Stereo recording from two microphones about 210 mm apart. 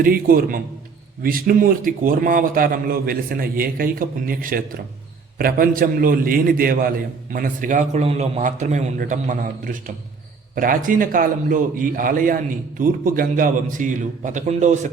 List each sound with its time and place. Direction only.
0.0 s a man's voice: 45° right (ahead or behind)